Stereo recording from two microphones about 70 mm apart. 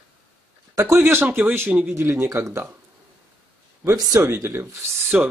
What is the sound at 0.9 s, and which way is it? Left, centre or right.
Speech, right.